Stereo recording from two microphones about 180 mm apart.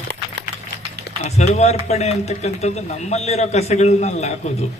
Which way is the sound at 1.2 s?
35° left (ahead or behind).